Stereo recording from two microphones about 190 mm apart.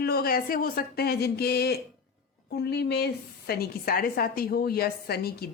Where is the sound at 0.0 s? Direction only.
55° left (ahead or behind).